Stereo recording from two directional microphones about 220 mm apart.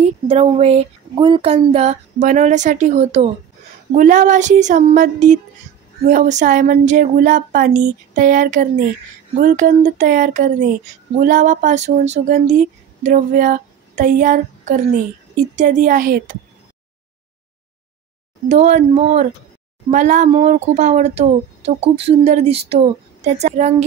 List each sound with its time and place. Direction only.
0.0 s speech: 30° right (ahead or behind)
18.5 s speech: 30° right (ahead or behind)